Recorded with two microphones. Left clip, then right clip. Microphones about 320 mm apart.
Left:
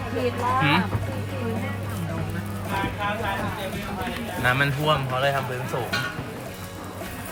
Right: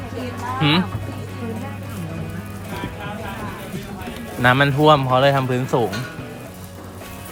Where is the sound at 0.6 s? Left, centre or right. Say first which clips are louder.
Right 4 dB; centre.